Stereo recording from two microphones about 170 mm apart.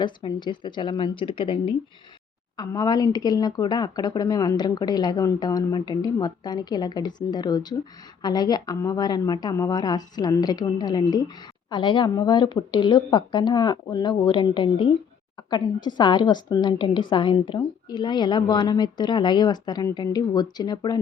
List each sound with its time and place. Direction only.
0.0 s a woman's voice: 25° left (ahead or behind)